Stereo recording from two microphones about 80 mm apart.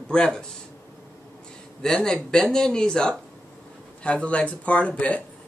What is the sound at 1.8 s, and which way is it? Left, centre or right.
Speech, centre.